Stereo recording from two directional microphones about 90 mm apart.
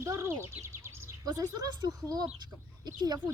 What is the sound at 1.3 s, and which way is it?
Speech, 45° right (ahead or behind).